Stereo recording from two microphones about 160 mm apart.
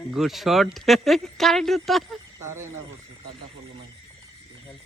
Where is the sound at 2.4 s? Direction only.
15° right (ahead or behind).